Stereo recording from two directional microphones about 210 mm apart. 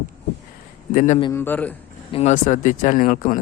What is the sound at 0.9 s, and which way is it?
Speech, 35° left (ahead or behind).